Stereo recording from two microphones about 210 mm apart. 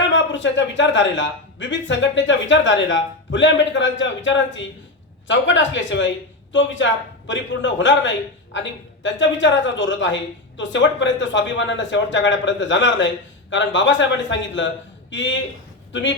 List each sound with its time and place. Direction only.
0.1 s a man's voice: 60° left (ahead or behind)